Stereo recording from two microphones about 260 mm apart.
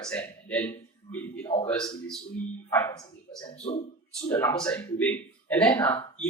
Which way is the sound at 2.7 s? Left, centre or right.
Centre.